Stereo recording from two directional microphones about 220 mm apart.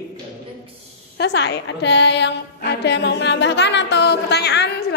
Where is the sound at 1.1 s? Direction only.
50° left (ahead or behind).